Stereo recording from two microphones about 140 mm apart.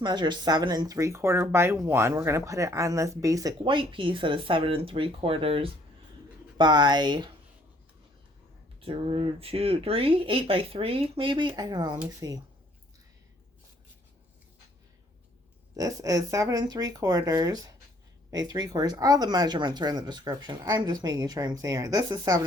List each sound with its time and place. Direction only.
0.0 s speech: 35° right (ahead or behind)
3.6 s speech: 35° right (ahead or behind)
8.8 s speech: 40° right (ahead or behind)
15.7 s speech: 25° right (ahead or behind)